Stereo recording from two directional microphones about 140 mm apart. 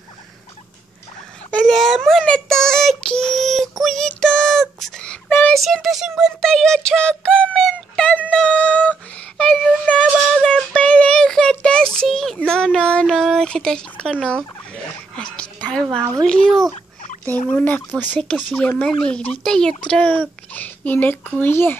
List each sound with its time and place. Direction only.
1.5 s child singing: centre (ahead or behind)
4.1 s a sound: 5° left (ahead or behind)
5.6 s synthetic singing: centre (ahead or behind)
14.2 s fowl: 5° left (ahead or behind)
15.6 s a woman's voice: 5° left (ahead or behind)
16.7 s fowl: 45° left (ahead or behind)
17.5 s a child's voice: 10° left (ahead or behind)